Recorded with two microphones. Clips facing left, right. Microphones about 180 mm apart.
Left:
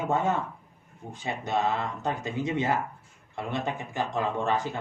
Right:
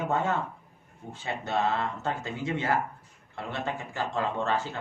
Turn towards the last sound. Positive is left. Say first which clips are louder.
# left 1 dB
turn(degrees=15)  # may be behind; listen again after turning